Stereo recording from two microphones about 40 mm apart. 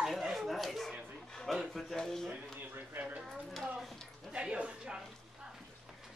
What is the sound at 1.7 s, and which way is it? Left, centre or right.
Speech, centre.